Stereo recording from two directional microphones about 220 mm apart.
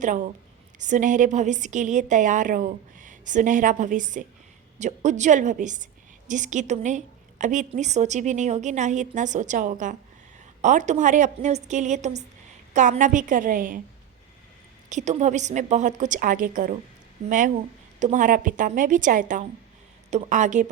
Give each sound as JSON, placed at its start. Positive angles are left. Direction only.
{"t": 0.0, "sound": "a woman's voice", "side_deg": -35}
{"t": 14.8, "sound": "a woman's voice", "side_deg": -35}